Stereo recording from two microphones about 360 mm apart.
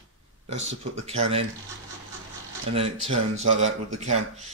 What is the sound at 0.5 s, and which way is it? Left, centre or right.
Speech, right.